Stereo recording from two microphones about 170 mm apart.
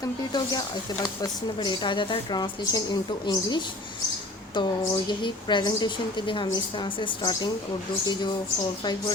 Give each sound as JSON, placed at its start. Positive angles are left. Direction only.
{"t": 0.0, "sound": "a woman's voice", "side_deg": 25}